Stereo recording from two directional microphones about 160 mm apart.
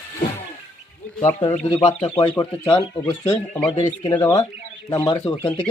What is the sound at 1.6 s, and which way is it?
Speech, 35° left (ahead or behind).